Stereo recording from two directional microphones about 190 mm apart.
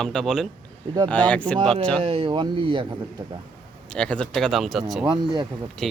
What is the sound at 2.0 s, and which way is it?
Speech, 30° right (ahead or behind).